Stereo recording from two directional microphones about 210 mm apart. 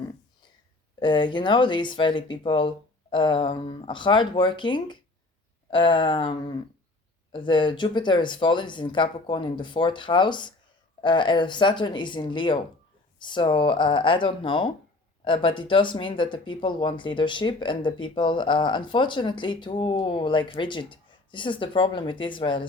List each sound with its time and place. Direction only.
0.9 s speech: 20° left (ahead or behind)
7.3 s speech: 25° left (ahead or behind)